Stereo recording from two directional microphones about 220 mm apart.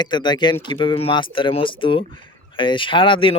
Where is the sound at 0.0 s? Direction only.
20° left (ahead or behind).